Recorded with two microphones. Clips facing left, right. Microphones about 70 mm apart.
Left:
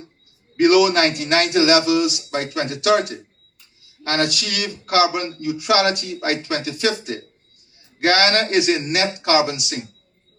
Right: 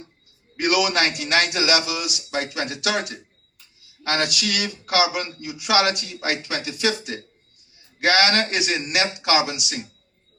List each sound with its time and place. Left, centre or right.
0.7 s speech: left